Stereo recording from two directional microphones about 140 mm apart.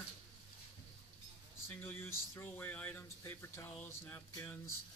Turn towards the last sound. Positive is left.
turn(degrees=15)  # may be behind; listen again after turning